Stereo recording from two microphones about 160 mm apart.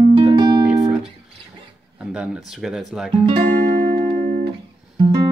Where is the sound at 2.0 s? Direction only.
5° right (ahead or behind).